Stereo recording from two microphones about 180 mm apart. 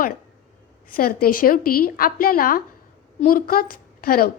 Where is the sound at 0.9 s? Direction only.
55° left (ahead or behind).